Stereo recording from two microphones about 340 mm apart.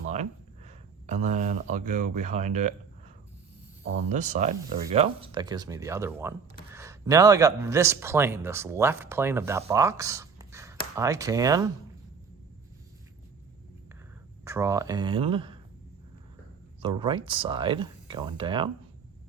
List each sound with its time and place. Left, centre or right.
0.1 s speech: centre
4.1 s speech: right
14.4 s speech: centre
17.0 s speech: centre